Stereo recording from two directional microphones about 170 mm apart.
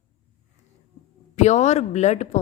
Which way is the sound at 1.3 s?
40° left (ahead or behind).